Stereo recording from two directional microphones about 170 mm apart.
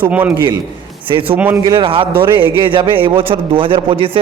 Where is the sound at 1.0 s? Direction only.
30° right (ahead or behind).